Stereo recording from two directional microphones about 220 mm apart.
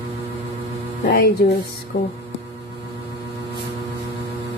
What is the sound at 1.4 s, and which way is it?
Speech, 45° left (ahead or behind).